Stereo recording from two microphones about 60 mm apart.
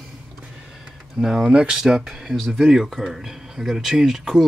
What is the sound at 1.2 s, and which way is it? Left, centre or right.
Speech, centre.